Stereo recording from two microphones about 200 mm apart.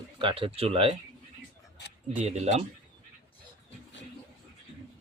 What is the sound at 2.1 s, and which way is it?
Speech, 35° right (ahead or behind).